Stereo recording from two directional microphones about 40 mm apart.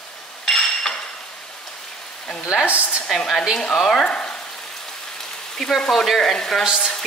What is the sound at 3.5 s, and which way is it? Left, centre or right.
Speech, centre.